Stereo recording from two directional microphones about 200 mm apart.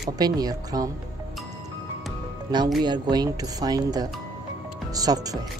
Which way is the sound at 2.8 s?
20° right (ahead or behind).